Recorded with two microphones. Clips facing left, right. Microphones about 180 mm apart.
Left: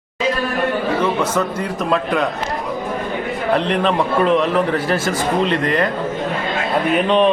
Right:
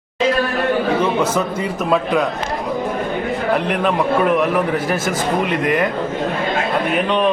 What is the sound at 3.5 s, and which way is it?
A man's voice, 10° right (ahead or behind).